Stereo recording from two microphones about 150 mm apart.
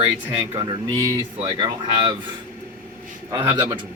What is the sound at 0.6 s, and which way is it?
Speech, 25° right (ahead or behind).